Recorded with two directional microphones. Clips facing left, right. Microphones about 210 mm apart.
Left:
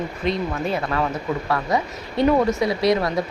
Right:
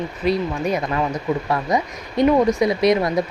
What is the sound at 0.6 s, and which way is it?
Speech, 15° right (ahead or behind).